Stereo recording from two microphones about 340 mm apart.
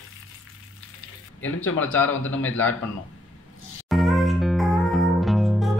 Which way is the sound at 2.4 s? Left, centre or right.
Centre.